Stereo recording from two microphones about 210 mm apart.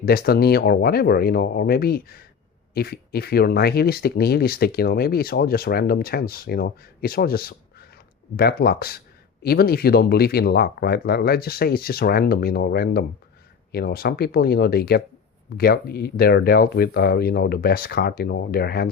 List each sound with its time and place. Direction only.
0.0 s speech: 45° left (ahead or behind)